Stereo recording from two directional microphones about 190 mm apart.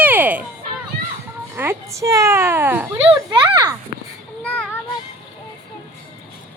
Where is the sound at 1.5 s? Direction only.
10° right (ahead or behind).